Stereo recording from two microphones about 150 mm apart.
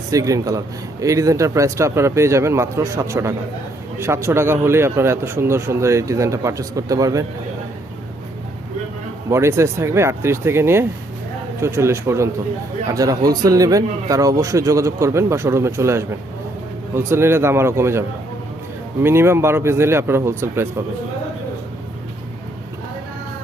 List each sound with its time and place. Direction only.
0.1 s a man's voice: 20° right (ahead or behind)
9.3 s a man's voice: 20° right (ahead or behind)
19.0 s speech: 15° right (ahead or behind)